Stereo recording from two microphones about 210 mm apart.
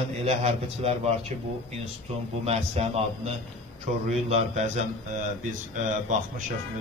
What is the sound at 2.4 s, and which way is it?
Speech, 30° right (ahead or behind).